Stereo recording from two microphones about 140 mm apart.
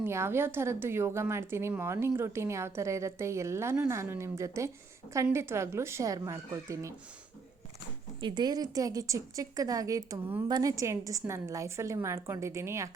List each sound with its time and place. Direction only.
0.0 s a woman's voice: 20° right (ahead or behind)
8.2 s a woman's voice: 30° right (ahead or behind)